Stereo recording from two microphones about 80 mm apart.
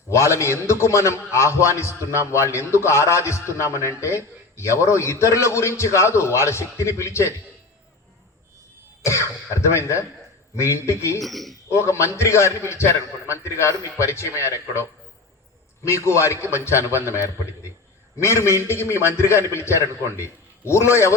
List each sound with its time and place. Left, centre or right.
0.1 s a man's voice: left
9.6 s a man's voice: left
11.2 s a man's voice: centre
11.7 s a man's voice: left